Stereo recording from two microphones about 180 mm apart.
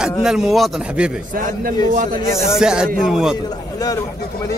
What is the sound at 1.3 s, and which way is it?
Speech, 50° right (ahead or behind).